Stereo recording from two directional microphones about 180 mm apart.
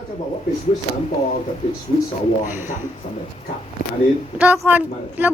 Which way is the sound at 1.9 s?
35° left (ahead or behind).